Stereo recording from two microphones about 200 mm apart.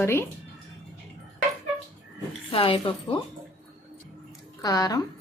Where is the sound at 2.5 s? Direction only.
25° left (ahead or behind).